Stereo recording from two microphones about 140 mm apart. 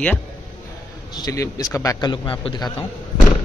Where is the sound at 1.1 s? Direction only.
25° left (ahead or behind).